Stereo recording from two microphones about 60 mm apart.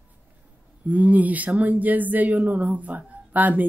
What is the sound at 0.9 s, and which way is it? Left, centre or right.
Speech, right.